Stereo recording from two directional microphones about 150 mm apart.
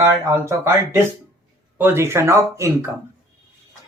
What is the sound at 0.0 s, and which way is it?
Speech, 20° right (ahead or behind).